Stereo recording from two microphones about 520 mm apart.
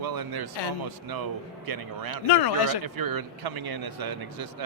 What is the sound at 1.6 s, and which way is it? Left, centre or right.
Speech, right.